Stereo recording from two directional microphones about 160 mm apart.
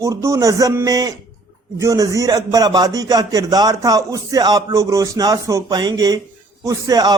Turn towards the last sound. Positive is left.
turn(degrees=-25)  # may be behind; listen again after turning